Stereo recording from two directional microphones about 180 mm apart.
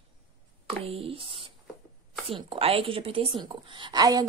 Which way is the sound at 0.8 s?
35° right (ahead or behind).